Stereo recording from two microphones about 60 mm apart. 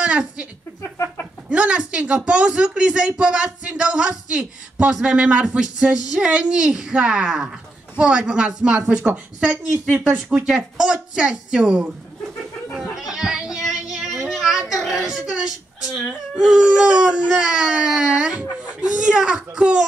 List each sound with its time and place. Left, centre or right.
0.0 s speech: centre
1.5 s speech: centre
10.1 s speech: centre
12.9 s music: centre
14.1 s a sound: centre
14.8 s speech: centre